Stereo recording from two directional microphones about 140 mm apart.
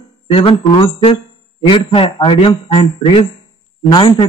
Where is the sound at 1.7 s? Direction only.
35° left (ahead or behind).